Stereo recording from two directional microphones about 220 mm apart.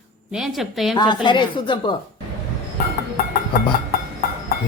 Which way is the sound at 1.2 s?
20° left (ahead or behind).